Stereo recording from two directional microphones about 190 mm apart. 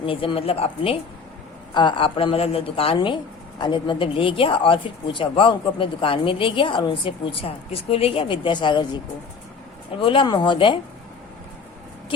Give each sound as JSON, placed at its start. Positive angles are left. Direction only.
{"t": 0.0, "sound": "speech", "side_deg": 30}
{"t": 10.0, "sound": "speech", "side_deg": 25}